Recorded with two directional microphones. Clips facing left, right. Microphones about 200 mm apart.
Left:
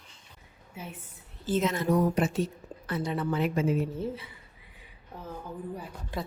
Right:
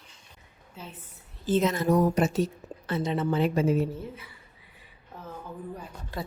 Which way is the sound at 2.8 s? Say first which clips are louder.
Right 3 dB; 25° right (ahead or behind).